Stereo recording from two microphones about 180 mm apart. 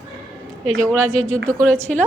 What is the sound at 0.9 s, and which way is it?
Speech, 15° right (ahead or behind).